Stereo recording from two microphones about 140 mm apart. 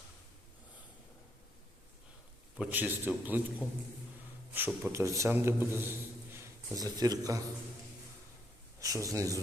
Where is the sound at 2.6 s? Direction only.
10° right (ahead or behind).